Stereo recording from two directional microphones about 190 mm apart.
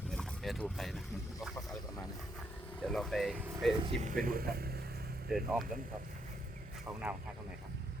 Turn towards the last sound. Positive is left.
turn(degrees=-10)  # may be behind; listen again after turning